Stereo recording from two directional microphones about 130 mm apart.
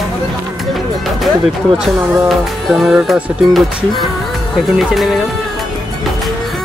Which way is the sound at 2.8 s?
Centre (ahead or behind).